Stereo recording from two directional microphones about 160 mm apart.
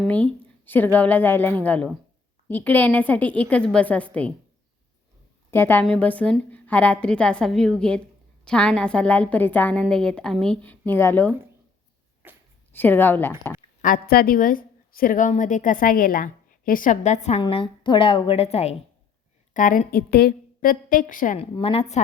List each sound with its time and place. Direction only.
0.1 s a woman's voice: 10° left (ahead or behind)
5.5 s a woman's voice: 15° left (ahead or behind)
12.7 s a woman's voice: 10° left (ahead or behind)
13.8 s a woman's voice: 65° left (ahead or behind); by 17.4 s 45° left (ahead or behind)
17.4 s a woman's voice: 30° left (ahead or behind)
19.5 s a woman's voice: 55° left (ahead or behind)
21.5 s a woman's voice: 35° left (ahead or behind)